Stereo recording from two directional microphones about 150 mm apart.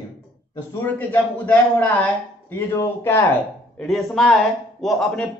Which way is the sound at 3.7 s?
Centre (ahead or behind).